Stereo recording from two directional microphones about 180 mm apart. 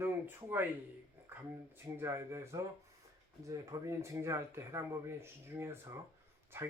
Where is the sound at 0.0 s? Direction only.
10° right (ahead or behind).